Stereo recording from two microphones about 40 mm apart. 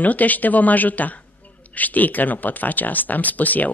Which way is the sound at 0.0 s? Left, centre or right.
Left.